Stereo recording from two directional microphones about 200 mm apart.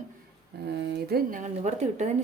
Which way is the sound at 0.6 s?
55° right (ahead or behind).